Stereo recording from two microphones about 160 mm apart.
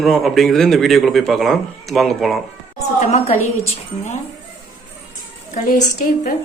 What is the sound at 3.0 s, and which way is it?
Speech, 45° left (ahead or behind).